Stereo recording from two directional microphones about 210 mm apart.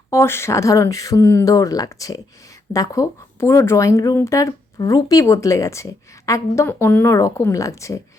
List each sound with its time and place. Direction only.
0.1 s speech: 10° left (ahead or behind)